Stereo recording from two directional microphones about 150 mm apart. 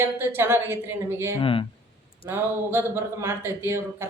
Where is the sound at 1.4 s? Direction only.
35° left (ahead or behind).